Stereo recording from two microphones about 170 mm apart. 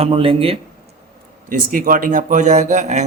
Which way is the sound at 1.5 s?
55° right (ahead or behind).